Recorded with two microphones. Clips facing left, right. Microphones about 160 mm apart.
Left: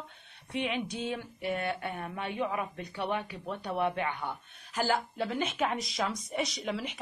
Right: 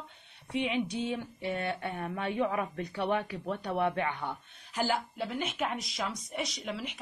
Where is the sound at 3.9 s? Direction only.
35° right (ahead or behind).